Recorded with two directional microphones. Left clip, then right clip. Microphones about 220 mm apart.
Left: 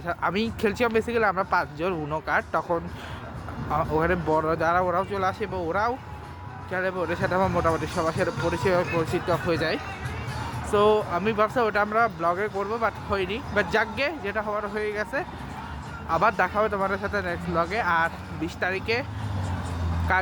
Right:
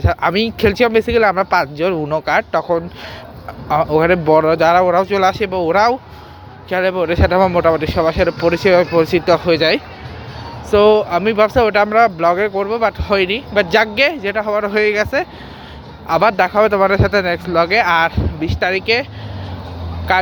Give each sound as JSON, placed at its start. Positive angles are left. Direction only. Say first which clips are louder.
{"t": 0.0, "sound": "speech", "louder": "right 11 dB", "side_deg": -30}
{"t": 20.1, "sound": "speech", "louder": "right 9 dB", "side_deg": -25}